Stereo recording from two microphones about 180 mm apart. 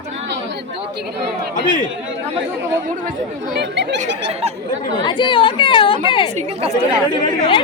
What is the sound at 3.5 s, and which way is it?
Speech, 70° right (ahead or behind).